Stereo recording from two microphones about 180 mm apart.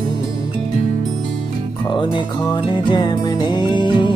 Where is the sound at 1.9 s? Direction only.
25° left (ahead or behind).